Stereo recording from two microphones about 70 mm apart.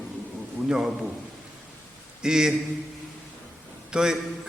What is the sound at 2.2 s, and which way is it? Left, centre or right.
Speech, centre.